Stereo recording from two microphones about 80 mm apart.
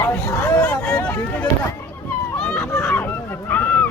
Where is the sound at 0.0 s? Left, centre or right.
Left.